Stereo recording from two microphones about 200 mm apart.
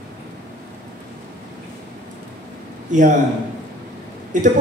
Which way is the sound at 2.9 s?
40° right (ahead or behind).